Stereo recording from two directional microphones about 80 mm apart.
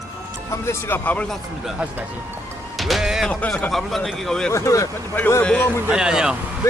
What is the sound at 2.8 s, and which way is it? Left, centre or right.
Music, centre.